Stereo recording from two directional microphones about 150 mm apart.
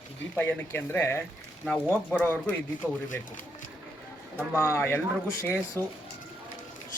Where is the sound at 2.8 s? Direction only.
15° right (ahead or behind).